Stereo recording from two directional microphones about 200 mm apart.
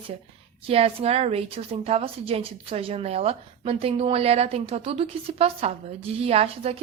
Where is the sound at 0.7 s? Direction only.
30° right (ahead or behind).